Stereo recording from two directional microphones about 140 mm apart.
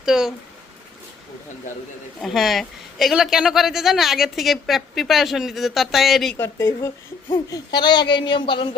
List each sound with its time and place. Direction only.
0.0 s a woman's voice: 5° right (ahead or behind)
2.2 s a woman's voice: centre (ahead or behind)
6.3 s speech: 20° left (ahead or behind)
7.3 s speech: 35° left (ahead or behind)